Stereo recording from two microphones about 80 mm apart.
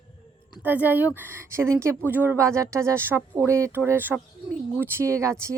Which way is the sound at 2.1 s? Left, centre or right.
Right.